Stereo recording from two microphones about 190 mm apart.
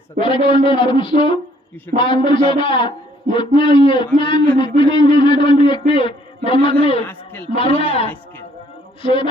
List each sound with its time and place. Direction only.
0.2 s a man's voice: 25° left (ahead or behind)
7.0 s a man's voice: 10° left (ahead or behind)
7.5 s a man's voice: 30° left (ahead or behind)